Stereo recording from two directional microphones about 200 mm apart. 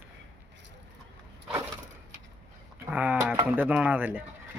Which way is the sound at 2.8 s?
10° right (ahead or behind).